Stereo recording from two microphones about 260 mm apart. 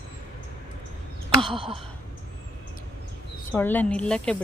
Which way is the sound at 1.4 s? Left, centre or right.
Centre.